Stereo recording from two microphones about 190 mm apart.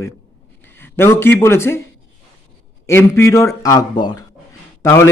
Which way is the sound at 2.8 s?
15° left (ahead or behind).